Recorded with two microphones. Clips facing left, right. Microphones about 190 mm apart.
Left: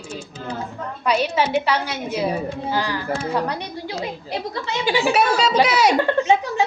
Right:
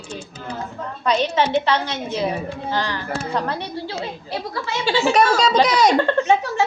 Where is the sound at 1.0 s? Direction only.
10° left (ahead or behind).